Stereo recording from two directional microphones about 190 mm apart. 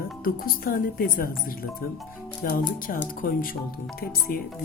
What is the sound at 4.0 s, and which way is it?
Speech, 45° left (ahead or behind).